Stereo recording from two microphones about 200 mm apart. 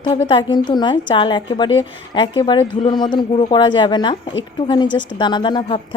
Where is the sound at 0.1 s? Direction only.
25° left (ahead or behind).